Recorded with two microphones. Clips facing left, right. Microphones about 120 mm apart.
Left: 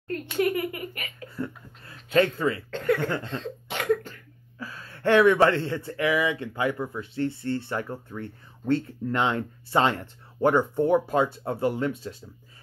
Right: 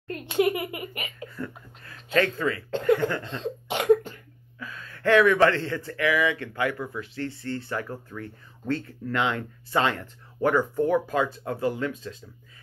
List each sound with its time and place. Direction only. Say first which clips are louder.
0.1 s a child's voice: right 1 dB; 15° right (ahead or behind)
1.3 s a sound: left 2 dB; 25° left (ahead or behind)
2.1 s speech: left 2 dB; 25° left (ahead or behind)
2.7 s speech: right 6 dB; 20° right (ahead or behind)
3.3 s cough: right 2 dB; 20° right (ahead or behind)
4.6 s speech: left 1 dB; 30° left (ahead or behind)